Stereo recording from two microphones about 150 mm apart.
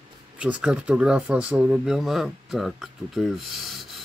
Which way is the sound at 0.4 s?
5° right (ahead or behind).